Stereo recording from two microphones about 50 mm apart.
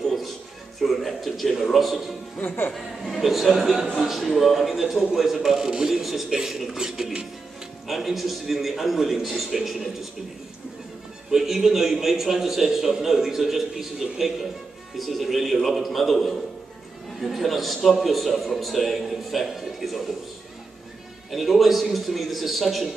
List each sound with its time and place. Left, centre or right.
0.0 s music: centre
0.7 s a man's voice: centre
2.4 s speech: left
2.7 s a man's voice: centre
11.2 s a man's voice: centre
21.3 s a man's voice: centre